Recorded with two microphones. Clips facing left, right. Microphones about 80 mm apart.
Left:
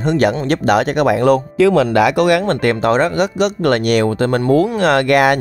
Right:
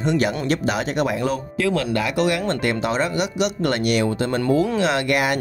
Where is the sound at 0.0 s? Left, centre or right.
Left.